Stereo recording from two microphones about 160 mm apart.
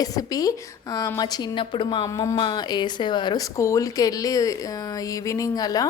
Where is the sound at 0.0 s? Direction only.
25° left (ahead or behind).